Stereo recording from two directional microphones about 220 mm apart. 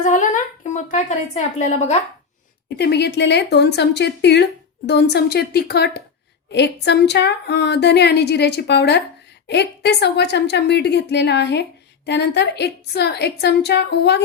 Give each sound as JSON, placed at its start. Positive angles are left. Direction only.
{"t": 0.0, "sound": "a woman's voice", "side_deg": 35}
{"t": 2.7, "sound": "a woman's voice", "side_deg": 50}